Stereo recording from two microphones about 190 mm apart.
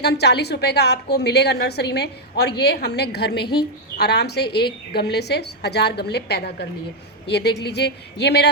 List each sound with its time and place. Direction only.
0.0 s a woman's voice: 60° left (ahead or behind)
3.4 s a woman's voice: 25° left (ahead or behind)
3.9 s a woman's voice: 60° left (ahead or behind)